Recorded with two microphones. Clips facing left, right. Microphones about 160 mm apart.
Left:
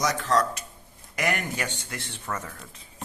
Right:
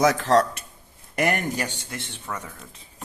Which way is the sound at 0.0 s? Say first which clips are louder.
Right 6 dB; 60° right (ahead or behind).